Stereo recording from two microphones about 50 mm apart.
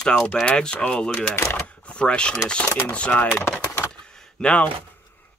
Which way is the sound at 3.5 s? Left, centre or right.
Left.